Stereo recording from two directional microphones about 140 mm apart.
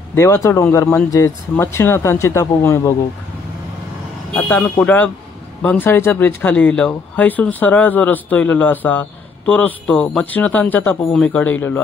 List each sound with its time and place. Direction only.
0.1 s speech: 20° left (ahead or behind)
4.4 s speech: 10° left (ahead or behind)